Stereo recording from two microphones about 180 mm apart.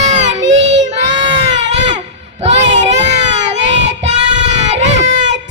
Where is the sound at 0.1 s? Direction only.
40° right (ahead or behind).